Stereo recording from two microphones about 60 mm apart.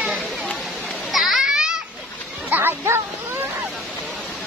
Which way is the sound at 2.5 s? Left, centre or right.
Right.